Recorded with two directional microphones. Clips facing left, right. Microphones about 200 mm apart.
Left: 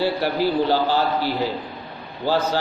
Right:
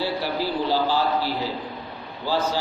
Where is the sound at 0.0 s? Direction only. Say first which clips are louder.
Left 5 dB; 60° left (ahead or behind).